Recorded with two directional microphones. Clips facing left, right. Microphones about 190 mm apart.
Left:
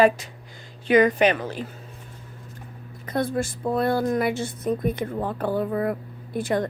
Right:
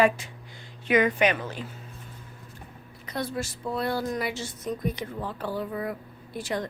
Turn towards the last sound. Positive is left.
turn(degrees=55)  # may be behind; listen again after turning